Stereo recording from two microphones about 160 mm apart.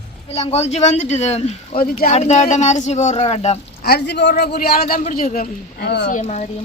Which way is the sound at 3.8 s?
85° left.